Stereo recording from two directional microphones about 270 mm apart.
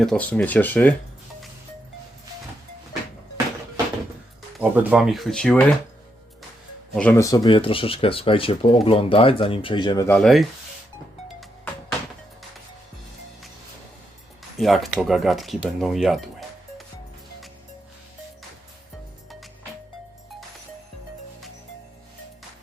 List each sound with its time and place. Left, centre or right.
0.0 s speech: centre
4.5 s speech: centre
6.9 s speech: centre
10.2 s speech: centre
11.3 s music: centre
14.6 s speech: centre